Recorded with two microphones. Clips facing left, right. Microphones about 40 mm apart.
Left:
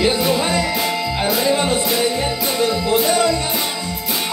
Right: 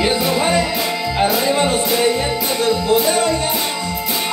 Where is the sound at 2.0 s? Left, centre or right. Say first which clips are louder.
Right 2 dB; right.